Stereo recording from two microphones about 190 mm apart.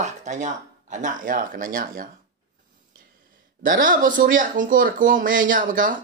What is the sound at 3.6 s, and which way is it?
Speech, 45° right (ahead or behind).